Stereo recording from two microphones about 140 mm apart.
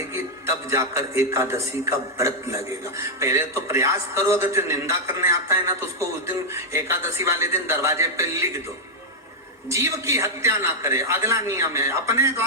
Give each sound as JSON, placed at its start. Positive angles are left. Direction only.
{"t": 0.7, "sound": "a man's voice", "side_deg": -20}
{"t": 9.6, "sound": "a man's voice", "side_deg": -20}